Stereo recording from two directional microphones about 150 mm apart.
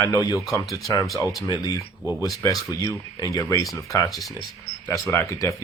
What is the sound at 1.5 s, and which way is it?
Speech, 25° left (ahead or behind).